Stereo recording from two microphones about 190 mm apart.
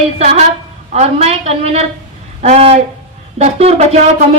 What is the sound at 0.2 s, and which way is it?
A woman's voice, 35° right (ahead or behind).